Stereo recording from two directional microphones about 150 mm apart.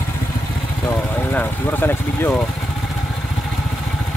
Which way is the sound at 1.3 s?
15° left (ahead or behind).